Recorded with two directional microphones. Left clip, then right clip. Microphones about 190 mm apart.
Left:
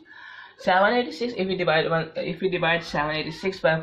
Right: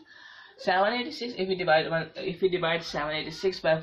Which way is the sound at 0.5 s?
40° left (ahead or behind).